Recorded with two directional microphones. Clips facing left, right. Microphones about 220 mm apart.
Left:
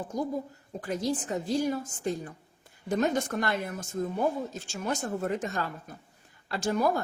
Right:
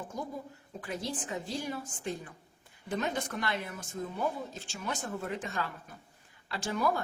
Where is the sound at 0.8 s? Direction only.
40° left (ahead or behind).